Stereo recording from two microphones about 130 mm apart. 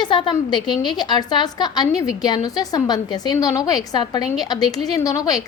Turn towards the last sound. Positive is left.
turn(degrees=30)  # may be behind; listen again after turning